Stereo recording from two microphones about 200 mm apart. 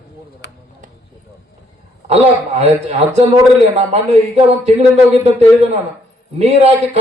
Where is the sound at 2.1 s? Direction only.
30° right (ahead or behind).